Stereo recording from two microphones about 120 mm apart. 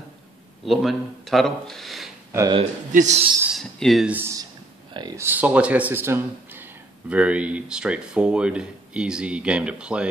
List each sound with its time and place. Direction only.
0.7 s speech: centre (ahead or behind)
2.9 s a man's voice: 80° right
3.4 s speech: centre (ahead or behind)
4.1 s speech: 20° right (ahead or behind)